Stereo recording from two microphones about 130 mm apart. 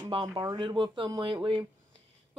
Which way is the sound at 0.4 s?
35° right (ahead or behind).